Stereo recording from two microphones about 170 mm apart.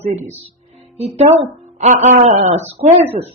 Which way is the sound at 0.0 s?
40° right (ahead or behind).